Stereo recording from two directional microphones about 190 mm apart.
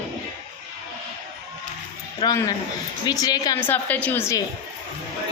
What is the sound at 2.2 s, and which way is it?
A woman's voice, 20° left (ahead or behind).